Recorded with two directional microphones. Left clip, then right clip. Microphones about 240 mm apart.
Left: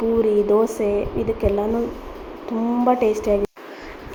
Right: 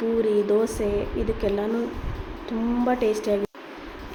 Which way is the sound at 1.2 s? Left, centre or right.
Left.